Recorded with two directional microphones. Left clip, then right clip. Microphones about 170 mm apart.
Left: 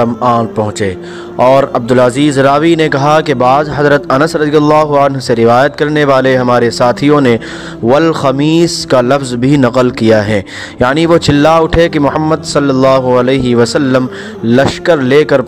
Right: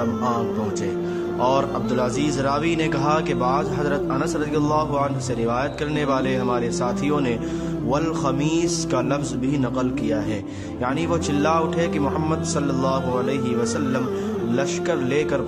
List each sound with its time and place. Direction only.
0.2 s speech: 50° left (ahead or behind)